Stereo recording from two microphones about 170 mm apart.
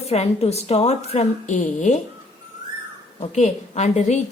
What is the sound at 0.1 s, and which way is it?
A woman's voice, 40° left (ahead or behind).